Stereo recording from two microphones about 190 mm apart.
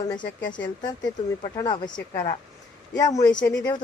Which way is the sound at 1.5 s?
20° left (ahead or behind).